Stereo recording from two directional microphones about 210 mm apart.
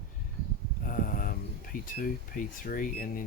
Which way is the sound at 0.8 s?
40° left (ahead or behind).